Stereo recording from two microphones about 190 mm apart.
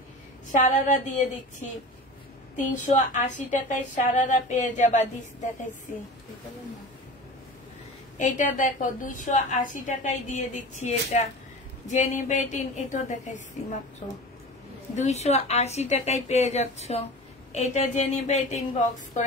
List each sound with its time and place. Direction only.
0.6 s a woman's voice: 40° left (ahead or behind)
8.2 s a woman's voice: 40° left (ahead or behind)